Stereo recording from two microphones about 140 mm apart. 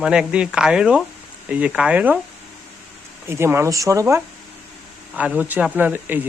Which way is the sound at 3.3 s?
20° right (ahead or behind).